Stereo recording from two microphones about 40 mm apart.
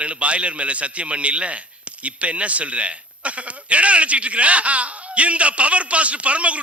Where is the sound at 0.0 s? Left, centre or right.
Right.